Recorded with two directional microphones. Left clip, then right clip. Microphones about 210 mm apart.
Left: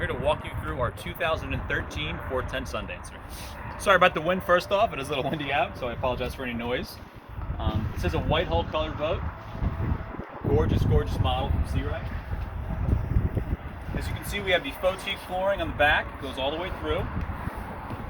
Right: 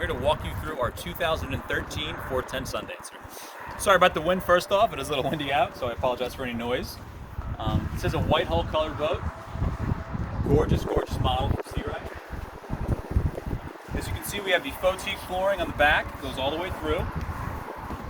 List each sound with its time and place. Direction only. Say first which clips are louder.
0.0 s speech: right 1 dB; 10° right (ahead or behind)
3.8 s speech: even; 5° right (ahead or behind)
7.6 s speech: right 2 dB; 20° left (ahead or behind)
10.6 s speech: right 2 dB; 40° left (ahead or behind)
14.3 s speech: even; 15° left (ahead or behind)